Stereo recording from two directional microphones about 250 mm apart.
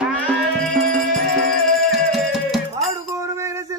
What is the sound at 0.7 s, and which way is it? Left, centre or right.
Music, right.